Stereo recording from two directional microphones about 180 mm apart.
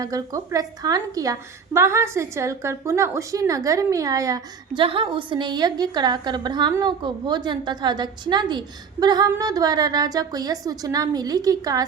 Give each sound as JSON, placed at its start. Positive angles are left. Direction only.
{"t": 0.0, "sound": "a woman's voice", "side_deg": -20}